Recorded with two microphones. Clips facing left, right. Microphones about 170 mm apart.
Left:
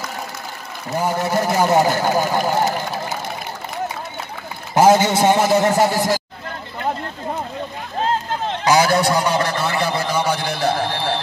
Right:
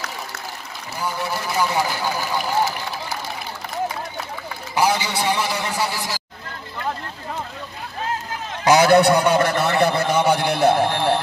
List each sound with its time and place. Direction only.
1.0 s a man's voice: 45° left (ahead or behind)
4.7 s a man's voice: 45° left (ahead or behind)
8.6 s a sound: 60° right (ahead or behind)